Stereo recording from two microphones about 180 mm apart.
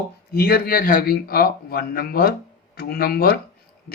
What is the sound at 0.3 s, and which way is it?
A man's voice, 60° left (ahead or behind).